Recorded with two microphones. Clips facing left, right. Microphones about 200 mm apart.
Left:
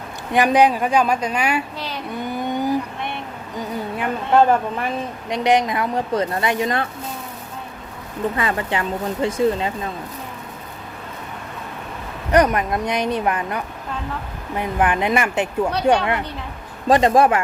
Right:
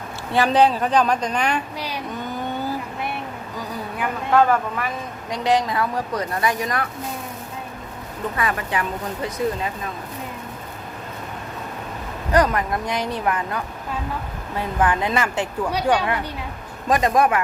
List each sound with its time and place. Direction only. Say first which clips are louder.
0.3 s speech: left 2 dB; 15° left (ahead or behind)
2.0 s vehicle: left 6 dB; 10° left (ahead or behind)
3.6 s a sound: left 3 dB; 25° left (ahead or behind)
5.3 s speech: left 2 dB; 20° left (ahead or behind)
8.4 s speech: right 1 dB; 25° left (ahead or behind)
12.3 s speech: left 2 dB; 20° left (ahead or behind)
16.9 s speech: left 4 dB; 30° left (ahead or behind)